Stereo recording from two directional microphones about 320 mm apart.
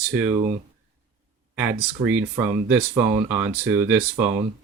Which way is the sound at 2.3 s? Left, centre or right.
Centre.